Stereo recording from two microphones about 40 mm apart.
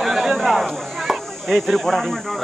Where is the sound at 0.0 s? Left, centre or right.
Centre.